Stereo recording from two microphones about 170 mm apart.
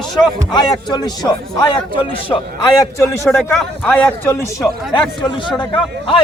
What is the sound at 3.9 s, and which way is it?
Speech, 10° left (ahead or behind).